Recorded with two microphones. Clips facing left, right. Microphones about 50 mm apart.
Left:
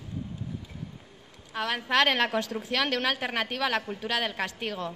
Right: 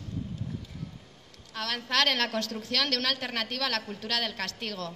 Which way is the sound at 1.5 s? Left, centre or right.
Centre.